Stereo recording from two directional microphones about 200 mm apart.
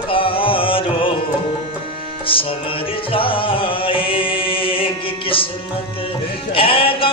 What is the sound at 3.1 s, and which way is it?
Music, 25° left (ahead or behind).